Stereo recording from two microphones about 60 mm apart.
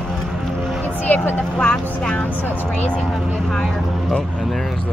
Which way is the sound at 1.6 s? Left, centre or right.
Centre.